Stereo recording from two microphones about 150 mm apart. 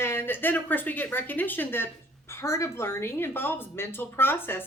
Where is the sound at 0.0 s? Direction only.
15° left (ahead or behind).